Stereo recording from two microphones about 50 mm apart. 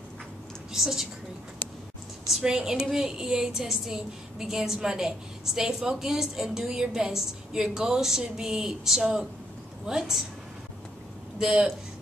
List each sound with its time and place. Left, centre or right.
0.7 s a woman's voice: centre
2.3 s a woman's voice: centre
11.3 s a woman's voice: centre